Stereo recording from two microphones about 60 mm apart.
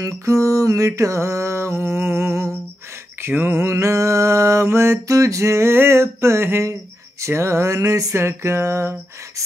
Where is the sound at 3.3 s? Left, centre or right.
Right.